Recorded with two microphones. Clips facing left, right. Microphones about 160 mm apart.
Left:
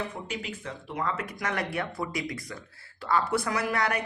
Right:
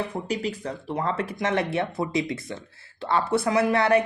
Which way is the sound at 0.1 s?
35° right (ahead or behind).